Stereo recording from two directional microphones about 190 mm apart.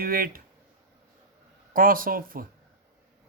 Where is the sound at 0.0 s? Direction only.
50° right (ahead or behind).